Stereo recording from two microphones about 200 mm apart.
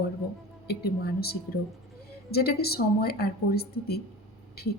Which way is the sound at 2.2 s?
50° left (ahead or behind).